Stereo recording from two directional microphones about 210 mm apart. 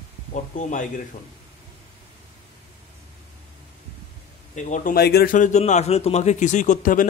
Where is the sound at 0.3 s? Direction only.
35° left (ahead or behind).